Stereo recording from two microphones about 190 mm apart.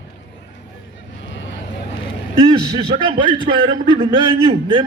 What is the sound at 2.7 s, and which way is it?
A man's voice, 25° right (ahead or behind).